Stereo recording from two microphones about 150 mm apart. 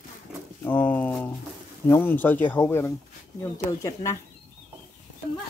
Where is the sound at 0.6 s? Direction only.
10° left (ahead or behind).